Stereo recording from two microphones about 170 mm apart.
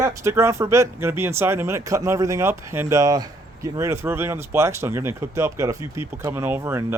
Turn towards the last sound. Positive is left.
turn(degrees=-15)  # may be behind; listen again after turning